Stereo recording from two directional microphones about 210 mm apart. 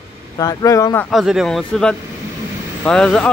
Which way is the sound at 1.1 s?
Centre (ahead or behind).